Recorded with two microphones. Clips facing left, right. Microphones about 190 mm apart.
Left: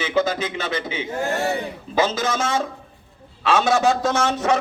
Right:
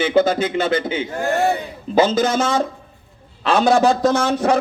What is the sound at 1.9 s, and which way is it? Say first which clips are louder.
Speech: right 6 dB; 30° right (ahead or behind).